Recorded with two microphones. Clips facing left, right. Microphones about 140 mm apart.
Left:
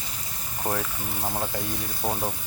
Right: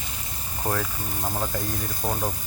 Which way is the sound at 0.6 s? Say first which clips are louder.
Right 1 dB; 15° left (ahead or behind).